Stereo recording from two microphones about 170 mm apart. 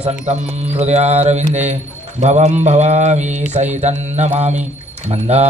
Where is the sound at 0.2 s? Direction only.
40° right (ahead or behind).